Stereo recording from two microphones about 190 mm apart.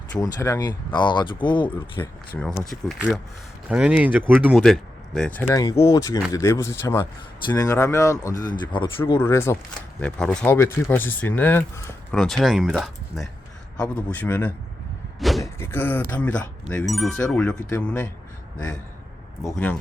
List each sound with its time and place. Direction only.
0.2 s speech: 15° left (ahead or behind)
2.0 s speech: 10° left (ahead or behind)
2.6 s speech: centre (ahead or behind); by 9.1 s 25° left (ahead or behind)
9.1 s speech: 15° left (ahead or behind)
12.1 s speech: 5° left (ahead or behind)
15.2 s a sound: centre (ahead or behind)
15.5 s speech: 10° left (ahead or behind)
19.5 s speech: 10° left (ahead or behind)